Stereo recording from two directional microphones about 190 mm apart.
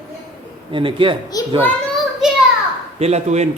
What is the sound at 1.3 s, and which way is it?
Speech, 20° left (ahead or behind).